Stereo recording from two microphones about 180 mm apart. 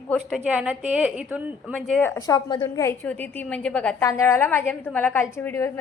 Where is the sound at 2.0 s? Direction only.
15° left (ahead or behind).